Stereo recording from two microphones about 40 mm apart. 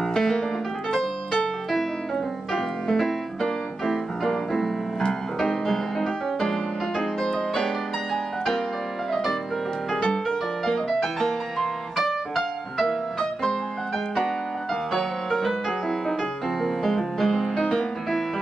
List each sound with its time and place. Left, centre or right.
0.1 s piano: centre
2.5 s music: centre
9.1 s music: centre
13.2 s music: centre
14.9 s music: centre
16.6 s music: centre